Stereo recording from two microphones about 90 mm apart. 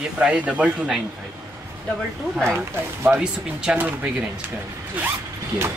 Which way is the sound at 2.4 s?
25° right (ahead or behind).